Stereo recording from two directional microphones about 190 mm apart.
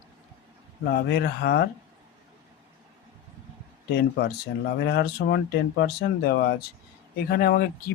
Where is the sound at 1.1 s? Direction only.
60° left (ahead or behind).